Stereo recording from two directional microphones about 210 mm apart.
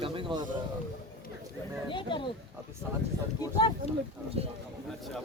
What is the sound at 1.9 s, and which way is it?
Speech, 20° left (ahead or behind).